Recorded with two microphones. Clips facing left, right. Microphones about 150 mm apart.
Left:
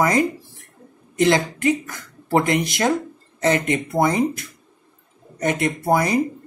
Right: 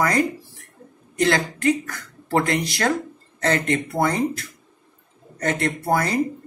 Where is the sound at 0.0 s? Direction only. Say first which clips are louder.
Left 2 dB; 20° left (ahead or behind).